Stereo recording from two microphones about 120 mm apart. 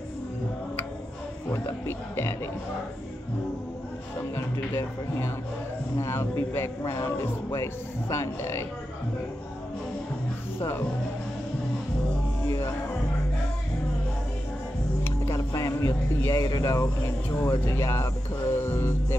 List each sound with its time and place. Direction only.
1.5 s a man's voice: 20° left (ahead or behind)
4.2 s a man's voice: 25° left (ahead or behind)
10.6 s a man's voice: 20° left (ahead or behind)
12.4 s speech: 25° left (ahead or behind)
15.0 s a man's voice: 25° left (ahead or behind)